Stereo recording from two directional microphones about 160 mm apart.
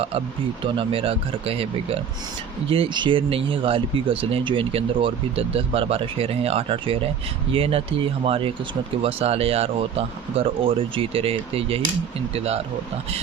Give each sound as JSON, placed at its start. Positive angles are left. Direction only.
{"t": 0.6, "sound": "speech", "side_deg": -35}